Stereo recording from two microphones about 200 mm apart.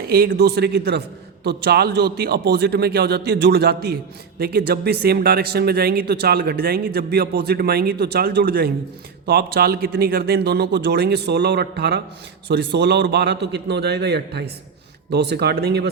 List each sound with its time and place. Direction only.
0.1 s a man's voice: 50° right (ahead or behind)